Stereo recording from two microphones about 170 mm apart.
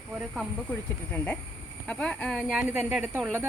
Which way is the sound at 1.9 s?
5° left (ahead or behind).